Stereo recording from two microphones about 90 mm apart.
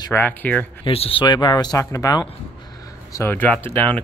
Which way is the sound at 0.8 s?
90° left.